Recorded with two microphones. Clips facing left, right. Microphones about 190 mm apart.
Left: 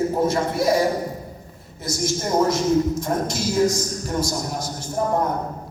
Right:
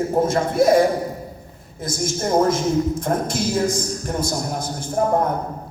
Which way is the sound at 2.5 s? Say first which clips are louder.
Even; 55° right (ahead or behind).